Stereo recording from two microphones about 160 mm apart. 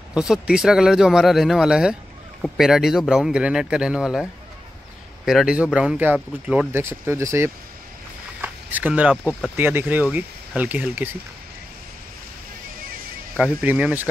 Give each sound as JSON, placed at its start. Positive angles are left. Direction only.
{"t": 0.1, "sound": "speech", "side_deg": -5}
{"t": 13.4, "sound": "speech", "side_deg": -10}